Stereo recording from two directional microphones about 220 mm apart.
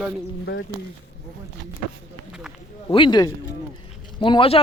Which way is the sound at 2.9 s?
20° left (ahead or behind).